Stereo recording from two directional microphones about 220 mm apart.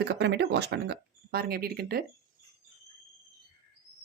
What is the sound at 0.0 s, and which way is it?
Speech, 50° right (ahead or behind).